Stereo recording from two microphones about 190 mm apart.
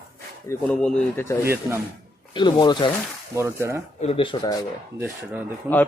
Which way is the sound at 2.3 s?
25° left (ahead or behind).